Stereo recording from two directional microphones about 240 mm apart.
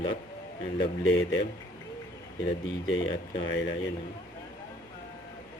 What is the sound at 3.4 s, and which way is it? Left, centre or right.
Speech, left.